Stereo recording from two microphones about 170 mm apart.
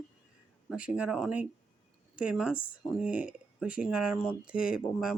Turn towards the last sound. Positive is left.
turn(degrees=-5)  # may be behind; listen again after turning